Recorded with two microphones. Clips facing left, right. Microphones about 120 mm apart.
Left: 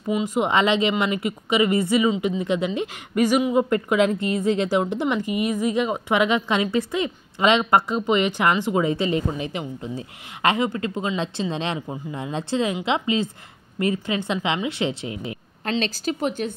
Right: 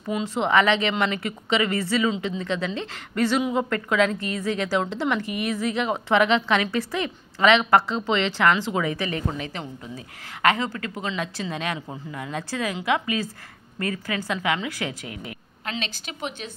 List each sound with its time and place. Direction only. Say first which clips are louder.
0.1 s a woman's voice: left 1 dB; 10° left (ahead or behind)
15.6 s speech: left 8 dB; 40° left (ahead or behind)